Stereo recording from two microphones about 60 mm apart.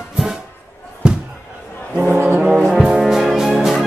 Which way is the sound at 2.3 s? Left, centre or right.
Centre.